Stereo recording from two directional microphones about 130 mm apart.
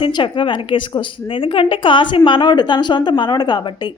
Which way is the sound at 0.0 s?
40° left (ahead or behind).